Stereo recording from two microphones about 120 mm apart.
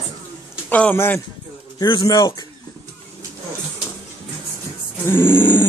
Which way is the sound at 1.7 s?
35° left (ahead or behind).